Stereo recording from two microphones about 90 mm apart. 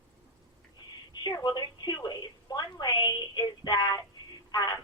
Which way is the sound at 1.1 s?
50° left (ahead or behind).